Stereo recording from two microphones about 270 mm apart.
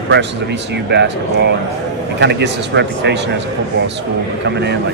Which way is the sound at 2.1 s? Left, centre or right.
Right.